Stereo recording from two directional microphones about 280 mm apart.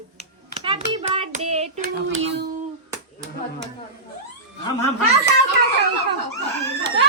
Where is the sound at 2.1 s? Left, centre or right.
Right.